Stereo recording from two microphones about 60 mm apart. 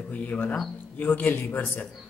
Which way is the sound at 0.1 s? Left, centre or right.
Left.